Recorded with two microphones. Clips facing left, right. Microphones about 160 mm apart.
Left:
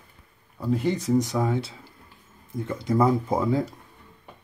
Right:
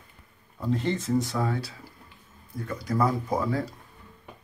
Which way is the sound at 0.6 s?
10° left (ahead or behind).